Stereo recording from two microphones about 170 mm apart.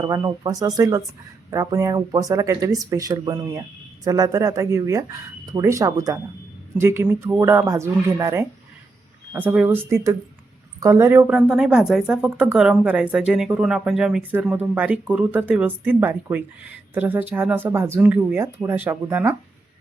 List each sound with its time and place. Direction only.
0.0 s speech: 20° right (ahead or behind)
11.3 s speech: 5° right (ahead or behind)